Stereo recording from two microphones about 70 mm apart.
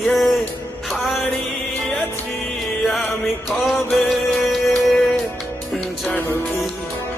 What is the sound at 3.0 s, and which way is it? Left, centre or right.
Music, left.